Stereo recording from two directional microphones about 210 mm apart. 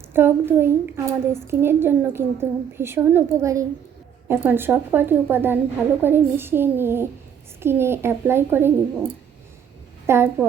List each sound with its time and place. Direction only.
0.1 s a woman's voice: 10° right (ahead or behind)
10.1 s a woman's voice: 10° right (ahead or behind)